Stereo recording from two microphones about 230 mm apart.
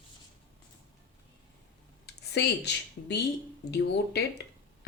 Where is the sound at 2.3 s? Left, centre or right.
Left.